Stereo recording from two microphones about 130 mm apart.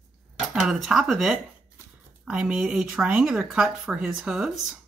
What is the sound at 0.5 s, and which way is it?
Speech, 5° right (ahead or behind).